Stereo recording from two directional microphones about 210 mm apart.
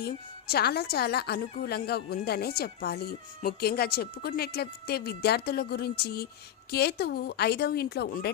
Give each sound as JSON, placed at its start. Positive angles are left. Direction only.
{"t": 0.0, "sound": "a woman's voice", "side_deg": 50}